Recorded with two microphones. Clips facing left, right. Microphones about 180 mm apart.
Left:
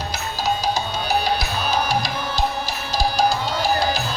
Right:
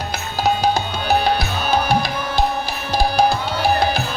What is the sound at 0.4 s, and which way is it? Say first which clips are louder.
Music: right 4 dB; 60° right (ahead or behind).